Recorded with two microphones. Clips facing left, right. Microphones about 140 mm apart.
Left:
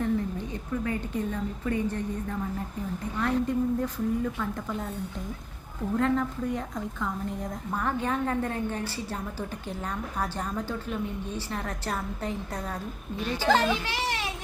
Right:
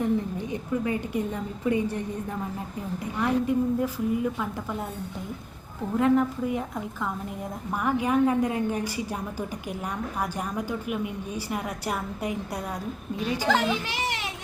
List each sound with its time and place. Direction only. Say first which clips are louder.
0.0 s a woman's voice: right 2 dB; 15° right (ahead or behind)
3.0 s a woman's voice: right 2 dB; 10° right (ahead or behind)
6.0 s a woman's voice: right 5 dB; 10° right (ahead or behind)
10.2 s a woman's voice: even; 10° right (ahead or behind)